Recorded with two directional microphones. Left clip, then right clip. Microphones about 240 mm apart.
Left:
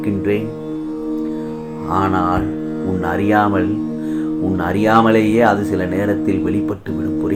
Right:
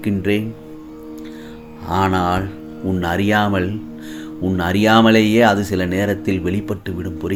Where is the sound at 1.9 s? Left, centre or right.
Right.